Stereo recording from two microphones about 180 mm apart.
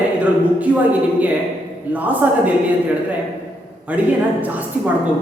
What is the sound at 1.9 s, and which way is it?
Speech, 10° right (ahead or behind).